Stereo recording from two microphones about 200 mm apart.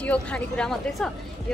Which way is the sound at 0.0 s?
5° left (ahead or behind).